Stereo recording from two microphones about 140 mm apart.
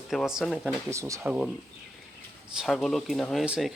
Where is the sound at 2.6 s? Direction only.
Centre (ahead or behind).